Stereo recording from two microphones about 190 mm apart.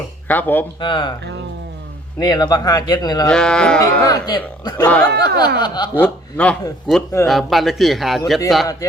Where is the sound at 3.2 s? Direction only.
5° left (ahead or behind).